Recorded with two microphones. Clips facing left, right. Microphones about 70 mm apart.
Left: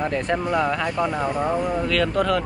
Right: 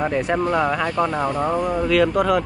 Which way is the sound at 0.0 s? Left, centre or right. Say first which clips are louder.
Right 3 dB; centre.